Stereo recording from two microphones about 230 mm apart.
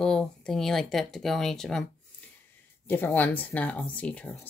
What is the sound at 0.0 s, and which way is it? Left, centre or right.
Speech, centre.